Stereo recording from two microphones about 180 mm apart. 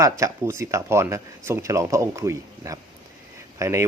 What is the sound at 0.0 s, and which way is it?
Speech, 15° right (ahead or behind).